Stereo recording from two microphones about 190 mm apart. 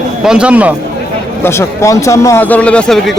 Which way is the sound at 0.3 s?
5° right (ahead or behind).